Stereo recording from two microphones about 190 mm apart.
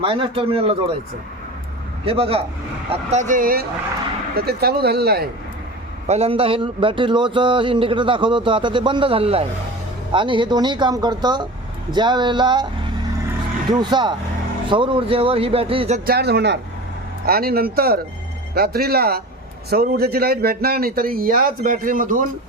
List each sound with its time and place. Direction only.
0.0 s speech: 30° right (ahead or behind)
2.0 s a man's voice: 30° right (ahead or behind); by 5.3 s 55° right (ahead or behind)
6.1 s speech: 30° right (ahead or behind)
13.7 s speech: 25° right (ahead or behind)
16.0 s a man's voice: 60° right (ahead or behind)